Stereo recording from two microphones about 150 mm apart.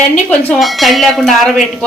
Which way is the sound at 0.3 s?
Centre (ahead or behind).